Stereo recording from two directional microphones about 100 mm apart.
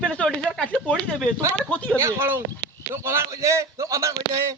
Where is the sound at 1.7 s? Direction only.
10° left (ahead or behind).